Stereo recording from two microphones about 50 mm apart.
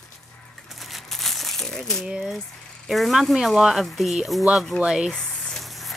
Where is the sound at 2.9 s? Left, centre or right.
Centre.